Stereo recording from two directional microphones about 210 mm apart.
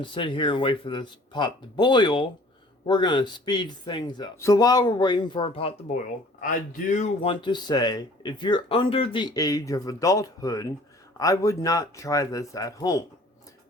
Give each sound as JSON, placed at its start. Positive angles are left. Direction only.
{"t": 0.0, "sound": "speech", "side_deg": 25}
{"t": 6.4, "sound": "speech", "side_deg": 40}